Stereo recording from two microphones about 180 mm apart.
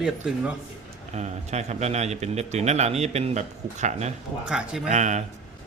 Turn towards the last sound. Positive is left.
turn(degrees=-40)  # may be behind; listen again after turning